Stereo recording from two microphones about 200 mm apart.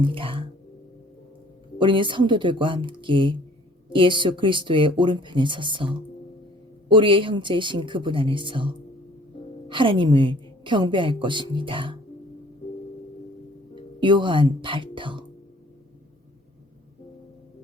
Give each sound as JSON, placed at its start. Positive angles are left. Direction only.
{"t": 0.0, "sound": "a woman's voice", "side_deg": -25}
{"t": 1.8, "sound": "a woman's voice", "side_deg": -25}
{"t": 14.0, "sound": "a woman's voice", "side_deg": -25}